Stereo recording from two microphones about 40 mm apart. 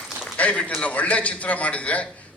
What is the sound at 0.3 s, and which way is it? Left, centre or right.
A man's voice, left.